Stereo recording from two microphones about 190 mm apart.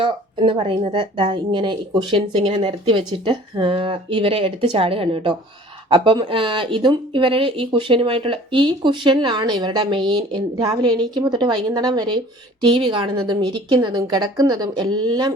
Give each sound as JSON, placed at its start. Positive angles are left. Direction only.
{"t": 0.0, "sound": "speech", "side_deg": -25}